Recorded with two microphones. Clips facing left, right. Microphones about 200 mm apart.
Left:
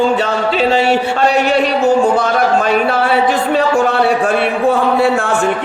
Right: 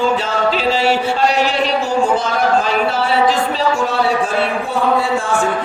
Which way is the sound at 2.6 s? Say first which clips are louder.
Left 4 dB; 60° left (ahead or behind).